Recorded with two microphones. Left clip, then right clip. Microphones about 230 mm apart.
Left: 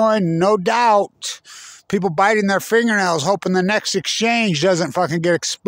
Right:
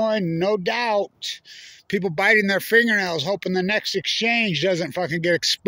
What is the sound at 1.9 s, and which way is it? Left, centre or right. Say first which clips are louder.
Speech: left 2 dB; left.